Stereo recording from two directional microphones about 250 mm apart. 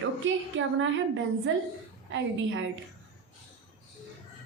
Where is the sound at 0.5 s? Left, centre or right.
Right.